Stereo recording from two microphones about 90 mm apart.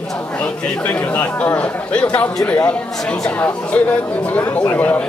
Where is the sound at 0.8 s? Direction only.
15° left (ahead or behind).